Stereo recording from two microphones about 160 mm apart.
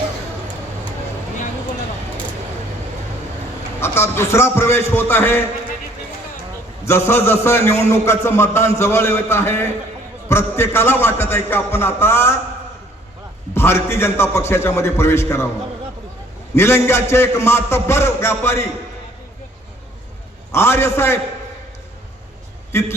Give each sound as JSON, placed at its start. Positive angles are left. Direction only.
{"t": 3.8, "sound": "a man's voice", "side_deg": 15}
{"t": 6.8, "sound": "a man's voice", "side_deg": 15}
{"t": 13.5, "sound": "a man's voice", "side_deg": 15}
{"t": 16.6, "sound": "a man's voice", "side_deg": 15}
{"t": 20.5, "sound": "a man's voice", "side_deg": 15}
{"t": 22.7, "sound": "a man's voice", "side_deg": 15}